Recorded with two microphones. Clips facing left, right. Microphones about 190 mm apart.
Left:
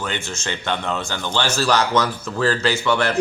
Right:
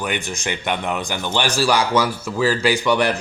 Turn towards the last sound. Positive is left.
turn(degrees=-15)  # may be behind; listen again after turning